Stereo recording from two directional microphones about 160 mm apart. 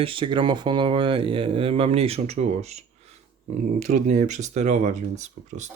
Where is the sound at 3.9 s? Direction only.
50° right (ahead or behind).